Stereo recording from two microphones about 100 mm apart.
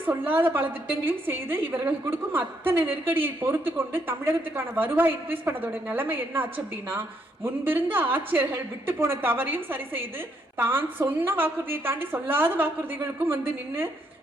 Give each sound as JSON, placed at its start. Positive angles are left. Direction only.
{"t": 0.0, "sound": "a woman's voice", "side_deg": -20}